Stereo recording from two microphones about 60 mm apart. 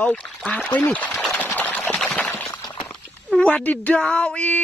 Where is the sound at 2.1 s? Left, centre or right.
Left.